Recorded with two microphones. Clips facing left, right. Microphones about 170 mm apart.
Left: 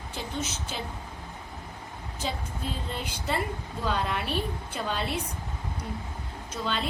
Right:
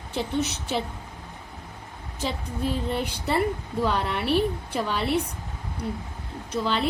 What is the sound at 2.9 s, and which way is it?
A woman's voice, 65° right (ahead or behind).